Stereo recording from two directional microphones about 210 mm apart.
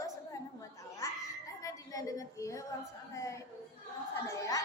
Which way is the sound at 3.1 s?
15° left (ahead or behind).